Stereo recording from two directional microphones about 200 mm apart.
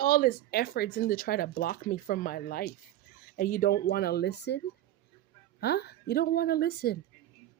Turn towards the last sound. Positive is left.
turn(degrees=50)  # may be behind; listen again after turning